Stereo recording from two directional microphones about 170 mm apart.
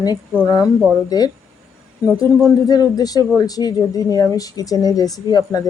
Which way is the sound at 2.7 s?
25° left (ahead or behind).